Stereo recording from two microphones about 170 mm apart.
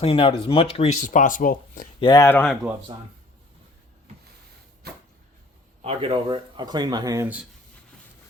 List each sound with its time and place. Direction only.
0.0 s speech: 35° left (ahead or behind)
1.0 s speech: 50° left (ahead or behind)
2.0 s speech: 25° left (ahead or behind)
2.2 s speech: 10° left (ahead or behind)
2.9 s speech: 30° right (ahead or behind)
4.8 s a sound: 65° right (ahead or behind)
5.8 s speech: 35° right (ahead or behind); by 7.3 s 20° right (ahead or behind)